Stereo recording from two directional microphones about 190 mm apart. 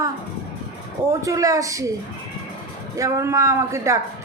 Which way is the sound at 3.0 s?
15° right (ahead or behind).